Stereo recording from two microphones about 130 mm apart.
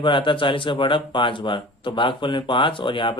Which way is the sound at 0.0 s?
40° left (ahead or behind).